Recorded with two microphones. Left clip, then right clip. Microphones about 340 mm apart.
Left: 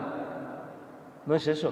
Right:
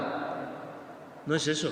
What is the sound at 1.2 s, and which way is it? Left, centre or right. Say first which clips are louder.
Speech: left 2 dB; centre.